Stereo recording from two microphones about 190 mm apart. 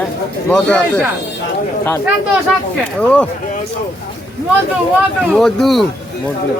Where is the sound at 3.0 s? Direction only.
5° left (ahead or behind).